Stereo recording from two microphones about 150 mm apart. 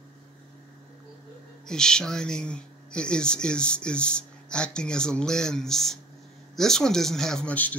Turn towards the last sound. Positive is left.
turn(degrees=10)  # may be behind; listen again after turning